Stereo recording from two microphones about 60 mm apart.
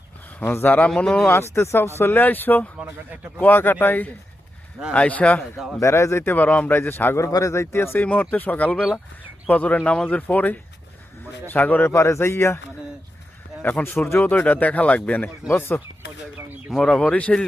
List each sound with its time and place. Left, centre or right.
0.5 s a man's voice: left
0.9 s speech: centre
1.3 s speech: left
2.2 s a man's voice: left
4.9 s a man's voice: left
5.8 s speech: left
6.3 s a man's voice: left
7.2 s speech: left
7.5 s speech: left
8.0 s a man's voice: left
11.9 s speech: left
13.6 s a man's voice: left
16.8 s a man's voice: centre